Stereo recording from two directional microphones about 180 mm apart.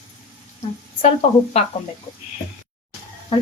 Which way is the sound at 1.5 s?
35° left (ahead or behind).